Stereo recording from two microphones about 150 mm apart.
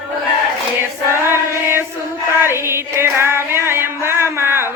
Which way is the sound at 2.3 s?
15° right (ahead or behind).